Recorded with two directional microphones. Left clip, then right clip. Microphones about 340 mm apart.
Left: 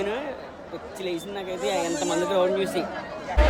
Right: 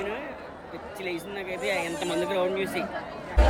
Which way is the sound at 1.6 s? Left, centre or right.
Centre.